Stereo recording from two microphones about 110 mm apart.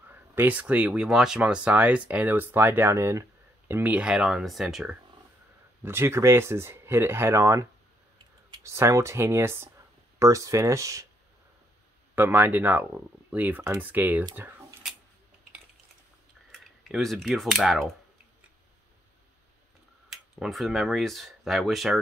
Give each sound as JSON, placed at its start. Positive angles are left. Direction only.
{"t": 0.1, "sound": "speech", "side_deg": -15}
{"t": 5.9, "sound": "speech", "side_deg": -25}
{"t": 8.6, "sound": "speech", "side_deg": -25}
{"t": 12.2, "sound": "speech", "side_deg": -20}
{"t": 16.8, "sound": "speech", "side_deg": 0}
{"t": 20.1, "sound": "speech", "side_deg": 0}